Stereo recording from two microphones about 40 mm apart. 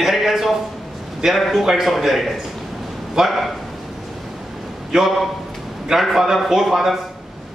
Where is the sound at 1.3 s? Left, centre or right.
Centre.